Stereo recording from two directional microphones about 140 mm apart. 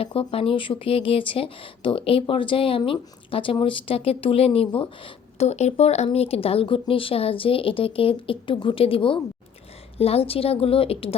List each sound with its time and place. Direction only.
0.0 s a woman's voice: 40° left (ahead or behind)